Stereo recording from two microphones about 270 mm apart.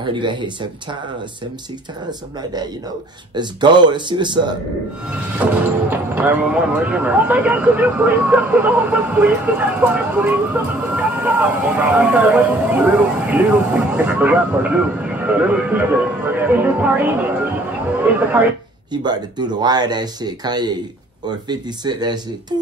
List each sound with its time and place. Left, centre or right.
0.0 s speech: centre
2.0 s speech: centre
5.5 s speech: centre